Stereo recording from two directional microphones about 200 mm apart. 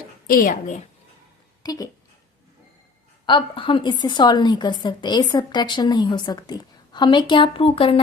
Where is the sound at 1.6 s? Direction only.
20° left (ahead or behind).